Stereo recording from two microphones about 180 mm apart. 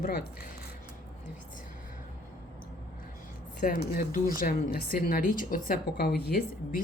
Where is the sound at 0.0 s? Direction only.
60° left (ahead or behind).